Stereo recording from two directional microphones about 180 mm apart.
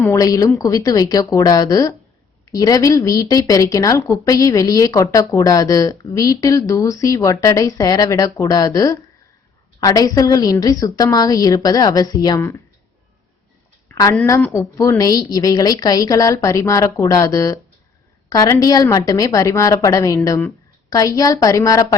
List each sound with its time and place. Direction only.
0.0 s speech: 20° left (ahead or behind)
13.9 s a woman's voice: 20° left (ahead or behind)